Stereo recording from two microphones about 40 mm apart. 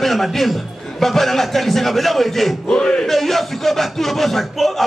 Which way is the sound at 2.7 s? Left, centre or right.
Left.